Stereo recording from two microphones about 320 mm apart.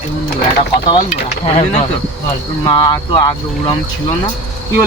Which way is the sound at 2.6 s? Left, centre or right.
Centre.